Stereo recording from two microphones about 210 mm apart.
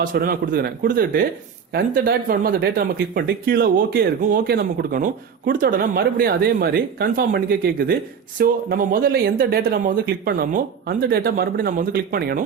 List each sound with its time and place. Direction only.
0.0 s speech: 40° right (ahead or behind)